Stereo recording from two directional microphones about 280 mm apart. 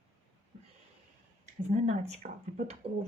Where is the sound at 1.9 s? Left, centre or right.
Right.